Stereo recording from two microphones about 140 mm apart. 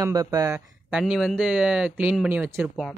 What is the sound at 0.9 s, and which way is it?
Speech, 5° right (ahead or behind).